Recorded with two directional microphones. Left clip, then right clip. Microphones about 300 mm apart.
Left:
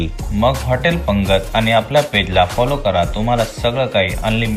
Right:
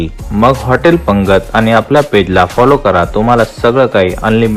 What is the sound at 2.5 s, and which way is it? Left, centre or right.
Speech, right.